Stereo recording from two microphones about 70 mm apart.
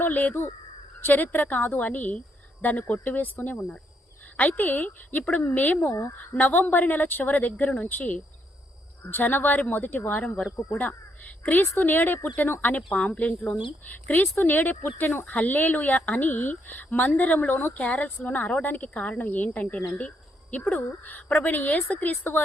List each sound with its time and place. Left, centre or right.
0.0 s a woman's voice: left
10.2 s a woman's voice: centre
20.0 s a sound: left
20.7 s a woman's voice: left